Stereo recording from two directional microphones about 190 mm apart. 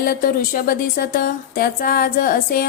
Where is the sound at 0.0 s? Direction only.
50° left (ahead or behind).